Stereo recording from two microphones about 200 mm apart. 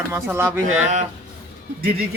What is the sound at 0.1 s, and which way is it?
Speech, 10° right (ahead or behind).